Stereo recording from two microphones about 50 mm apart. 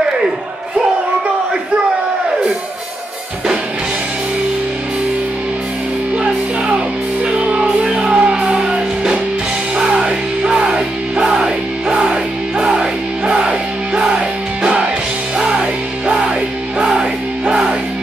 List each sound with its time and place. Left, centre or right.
6.1 s music: centre